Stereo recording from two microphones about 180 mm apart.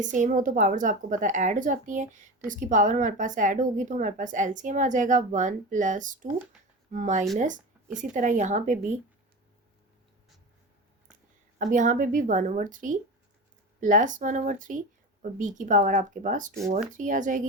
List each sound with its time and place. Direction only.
0.0 s speech: 45° right (ahead or behind)
6.2 s speech: 10° right (ahead or behind)
6.9 s speech: 45° right (ahead or behind)
11.5 s speech: 45° right (ahead or behind)